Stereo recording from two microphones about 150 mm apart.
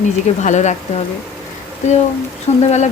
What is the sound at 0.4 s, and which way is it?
Speech, 50° left (ahead or behind).